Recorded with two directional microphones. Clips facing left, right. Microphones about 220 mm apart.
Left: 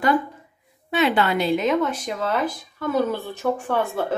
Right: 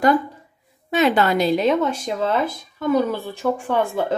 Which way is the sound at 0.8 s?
45° right (ahead or behind).